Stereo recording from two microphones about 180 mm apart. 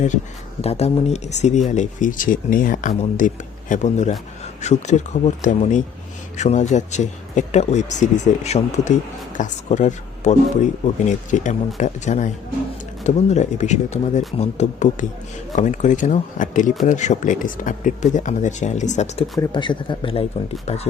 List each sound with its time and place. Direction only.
0.6 s speech: 35° left (ahead or behind)
19.4 s speech: 25° left (ahead or behind)